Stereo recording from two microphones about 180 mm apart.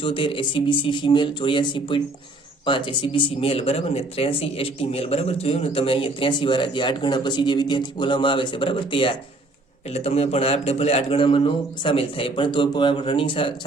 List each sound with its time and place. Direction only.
0.0 s speech: 30° left (ahead or behind)